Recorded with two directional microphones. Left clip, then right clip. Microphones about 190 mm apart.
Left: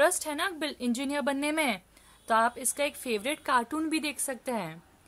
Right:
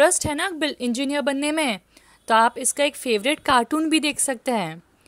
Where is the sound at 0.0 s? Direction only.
35° right (ahead or behind).